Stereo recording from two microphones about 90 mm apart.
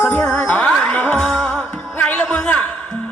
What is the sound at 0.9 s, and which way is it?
Music, 20° left (ahead or behind).